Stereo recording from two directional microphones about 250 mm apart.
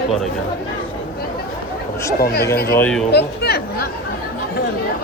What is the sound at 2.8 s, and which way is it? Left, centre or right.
Speech, centre.